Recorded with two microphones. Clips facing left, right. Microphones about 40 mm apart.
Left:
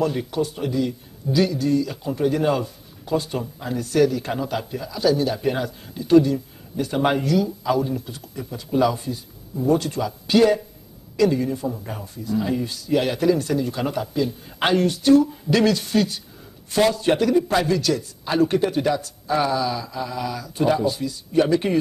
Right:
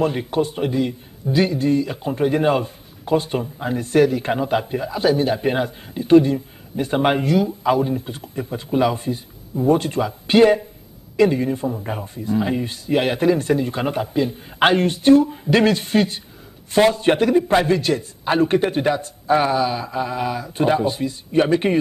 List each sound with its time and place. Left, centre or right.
0.0 s a man's voice: right